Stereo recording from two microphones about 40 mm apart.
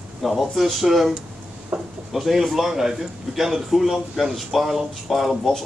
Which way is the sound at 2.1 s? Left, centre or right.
Centre.